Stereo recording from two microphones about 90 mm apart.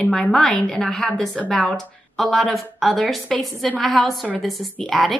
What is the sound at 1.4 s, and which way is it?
A woman's voice, 15° left (ahead or behind).